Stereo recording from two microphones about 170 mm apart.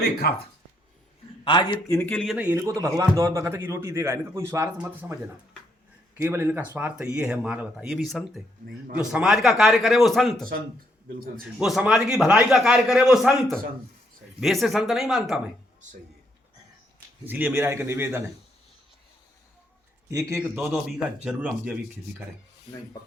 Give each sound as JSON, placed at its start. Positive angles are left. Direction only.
{"t": 0.2, "sound": "speech", "side_deg": 65}
{"t": 1.5, "sound": "a man's voice", "side_deg": 25}
{"t": 11.6, "sound": "a man's voice", "side_deg": -5}
{"t": 17.2, "sound": "a man's voice", "side_deg": -10}
{"t": 20.1, "sound": "a man's voice", "side_deg": -20}
{"t": 20.6, "sound": "a man's voice", "side_deg": 0}